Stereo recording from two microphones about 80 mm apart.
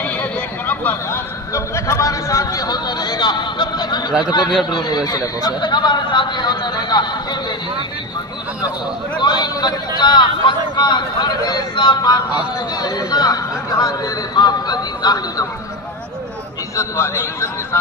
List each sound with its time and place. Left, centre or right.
0.7 s speech: left
1.5 s speech: left
9.2 s speech: left
12.8 s speech: left
13.7 s a man's voice: left
14.3 s speech: left
16.7 s a man's voice: left